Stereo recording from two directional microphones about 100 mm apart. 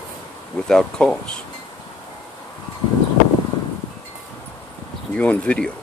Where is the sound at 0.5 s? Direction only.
5° left (ahead or behind).